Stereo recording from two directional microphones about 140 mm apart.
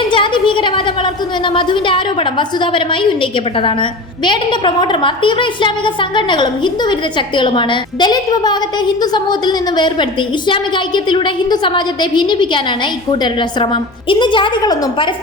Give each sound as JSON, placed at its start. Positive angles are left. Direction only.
{"t": 0.1, "sound": "a woman's voice", "side_deg": 35}